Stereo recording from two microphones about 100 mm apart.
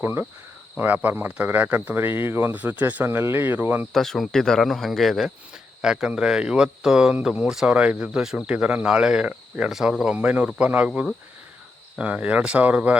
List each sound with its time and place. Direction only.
0.0 s speech: 20° right (ahead or behind)
3.9 s speech: centre (ahead or behind); by 13.0 s 15° right (ahead or behind)